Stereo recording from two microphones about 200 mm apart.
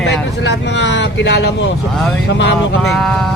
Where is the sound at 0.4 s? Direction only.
65° left (ahead or behind).